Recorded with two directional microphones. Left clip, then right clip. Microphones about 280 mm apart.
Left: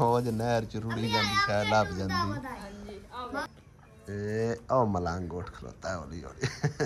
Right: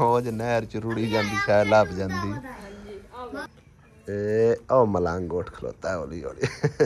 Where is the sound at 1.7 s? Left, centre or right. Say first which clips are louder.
Right 7 dB; centre.